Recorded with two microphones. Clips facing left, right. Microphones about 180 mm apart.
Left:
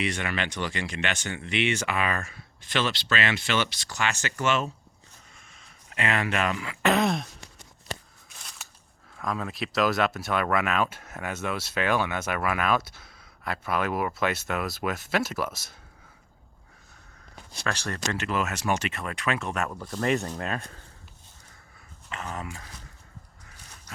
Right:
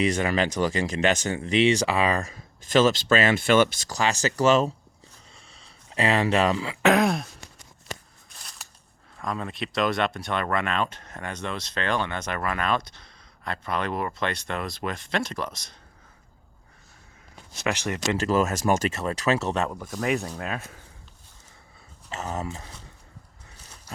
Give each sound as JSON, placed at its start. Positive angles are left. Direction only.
{"t": 0.0, "sound": "speech", "side_deg": -40}
{"t": 3.9, "sound": "speech", "side_deg": -35}
{"t": 5.5, "sound": "a sound", "side_deg": -30}
{"t": 6.8, "sound": "speech", "side_deg": -5}
{"t": 8.3, "sound": "scissors", "side_deg": 0}
{"t": 9.1, "sound": "speech", "side_deg": 0}
{"t": 17.6, "sound": "speech", "side_deg": -15}
{"t": 18.2, "sound": "speech", "side_deg": -40}
{"t": 19.6, "sound": "speech", "side_deg": -10}
{"t": 22.1, "sound": "speech", "side_deg": -35}